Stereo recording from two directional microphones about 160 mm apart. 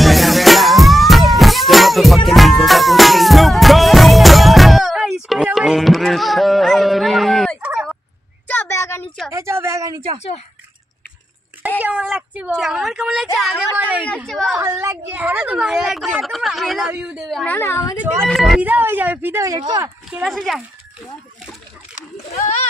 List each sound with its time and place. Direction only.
0.0 s music: centre (ahead or behind)
8.5 s a sound: 15° left (ahead or behind)
9.3 s a sound: 15° right (ahead or behind)
11.8 s a woman's voice: 10° right (ahead or behind)
14.5 s a woman's voice: 15° right (ahead or behind)
17.3 s a woman's voice: 5° left (ahead or behind)
17.6 s a woman's voice: 15° left (ahead or behind)
17.9 s a woman's voice: 10° right (ahead or behind)
18.3 s a woman's voice: centre (ahead or behind)
18.7 s a woman's voice: 10° right (ahead or behind)
20.1 s a woman's voice: centre (ahead or behind)
21.9 s a child's voice: 45° left (ahead or behind)